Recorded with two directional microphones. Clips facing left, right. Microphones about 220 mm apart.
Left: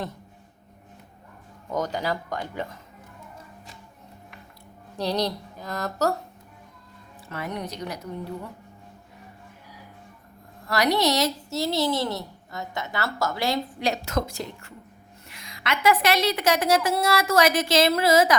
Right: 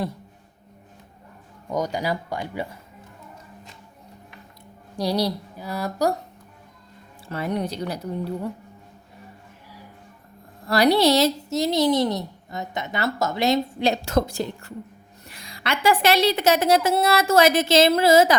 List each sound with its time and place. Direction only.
1.7 s speech: 10° right (ahead or behind)
4.9 s speech: 10° right (ahead or behind)
7.3 s a woman's voice: 30° right (ahead or behind)
10.7 s a woman's voice: 30° right (ahead or behind)